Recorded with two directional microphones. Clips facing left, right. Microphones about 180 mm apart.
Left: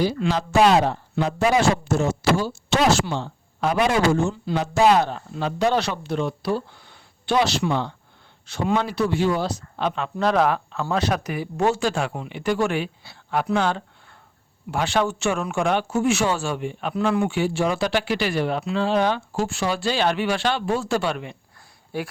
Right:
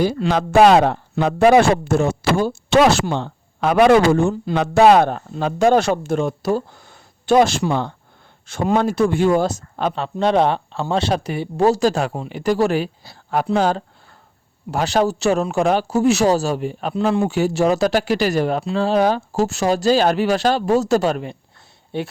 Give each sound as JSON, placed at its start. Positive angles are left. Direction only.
{"t": 0.0, "sound": "speech", "side_deg": -50}
{"t": 9.9, "sound": "speech", "side_deg": -30}
{"t": 21.9, "sound": "speech", "side_deg": -25}